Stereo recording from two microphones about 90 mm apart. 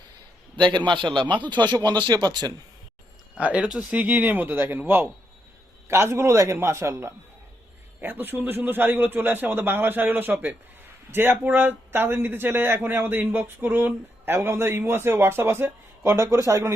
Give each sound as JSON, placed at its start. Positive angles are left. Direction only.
{"t": 0.7, "sound": "a man's voice", "side_deg": -60}
{"t": 3.3, "sound": "a man's voice", "side_deg": -15}